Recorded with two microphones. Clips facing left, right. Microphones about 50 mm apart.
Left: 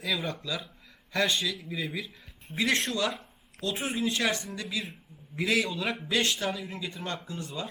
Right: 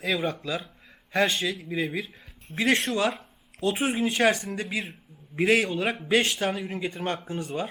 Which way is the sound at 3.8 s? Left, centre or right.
Right.